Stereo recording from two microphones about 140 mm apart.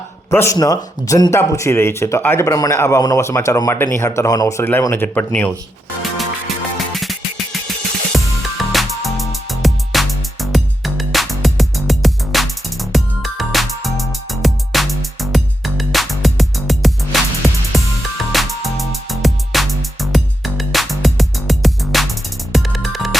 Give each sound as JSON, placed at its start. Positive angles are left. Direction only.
{"t": 0.3, "sound": "speech", "side_deg": 20}
{"t": 6.7, "sound": "music", "side_deg": 0}
{"t": 8.7, "sound": "music", "side_deg": 0}